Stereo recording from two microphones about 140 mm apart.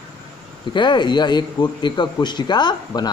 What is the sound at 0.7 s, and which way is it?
A man's voice, 35° left (ahead or behind).